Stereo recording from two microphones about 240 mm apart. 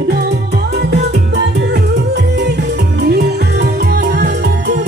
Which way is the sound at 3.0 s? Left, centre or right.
Right.